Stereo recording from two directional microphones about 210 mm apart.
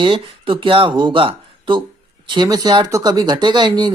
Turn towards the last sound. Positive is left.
turn(degrees=-20)  # may be behind; listen again after turning